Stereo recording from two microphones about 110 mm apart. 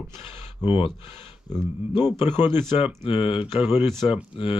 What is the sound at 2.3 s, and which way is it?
Speech, 20° right (ahead or behind).